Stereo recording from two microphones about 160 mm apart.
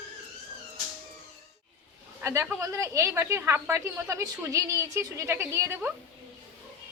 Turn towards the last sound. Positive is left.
turn(degrees=-10)  # may be behind; listen again after turning